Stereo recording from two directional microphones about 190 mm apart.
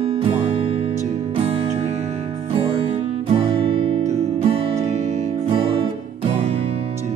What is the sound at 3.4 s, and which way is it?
Music, 30° right (ahead or behind).